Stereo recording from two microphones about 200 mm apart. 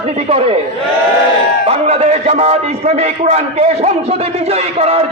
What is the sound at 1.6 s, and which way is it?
A man's voice, 30° right (ahead or behind).